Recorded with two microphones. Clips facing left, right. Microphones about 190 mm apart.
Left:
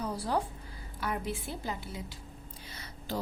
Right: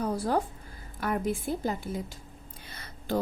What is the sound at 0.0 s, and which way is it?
A woman's voice, 50° right (ahead or behind).